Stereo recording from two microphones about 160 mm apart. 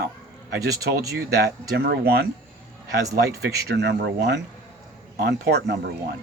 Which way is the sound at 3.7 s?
90° right.